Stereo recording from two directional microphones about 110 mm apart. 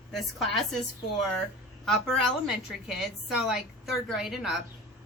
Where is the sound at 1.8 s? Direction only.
Centre (ahead or behind).